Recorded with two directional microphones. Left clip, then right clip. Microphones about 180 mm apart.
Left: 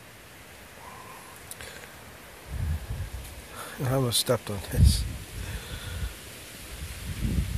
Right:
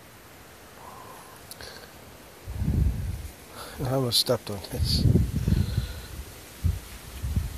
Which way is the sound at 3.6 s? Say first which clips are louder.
Right 1 dB; 5° left (ahead or behind).